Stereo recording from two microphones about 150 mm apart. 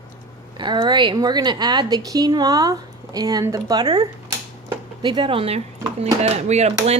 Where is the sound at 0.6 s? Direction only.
30° right (ahead or behind).